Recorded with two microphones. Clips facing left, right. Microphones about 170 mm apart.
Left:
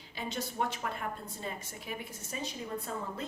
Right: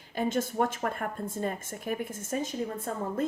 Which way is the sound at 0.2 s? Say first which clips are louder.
Right 8 dB; 50° right (ahead or behind).